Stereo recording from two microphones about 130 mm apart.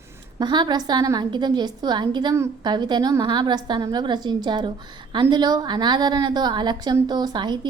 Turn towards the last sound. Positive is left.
turn(degrees=-35)  # may be behind; listen again after turning